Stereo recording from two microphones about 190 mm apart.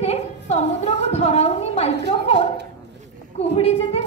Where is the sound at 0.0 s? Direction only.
35° left (ahead or behind).